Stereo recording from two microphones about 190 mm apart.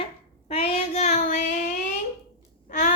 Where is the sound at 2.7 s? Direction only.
40° left (ahead or behind).